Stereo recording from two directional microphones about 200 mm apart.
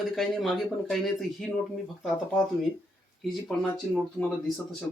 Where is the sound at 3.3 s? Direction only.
Centre (ahead or behind).